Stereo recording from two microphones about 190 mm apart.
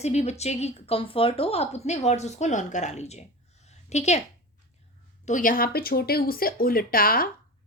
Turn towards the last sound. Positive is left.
turn(degrees=50)  # may be behind; listen again after turning